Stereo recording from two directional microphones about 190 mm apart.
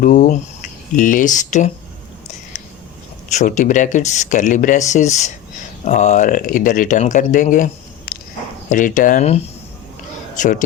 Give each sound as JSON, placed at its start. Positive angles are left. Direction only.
{"t": 0.0, "sound": "speech", "side_deg": 45}
{"t": 3.2, "sound": "speech", "side_deg": 40}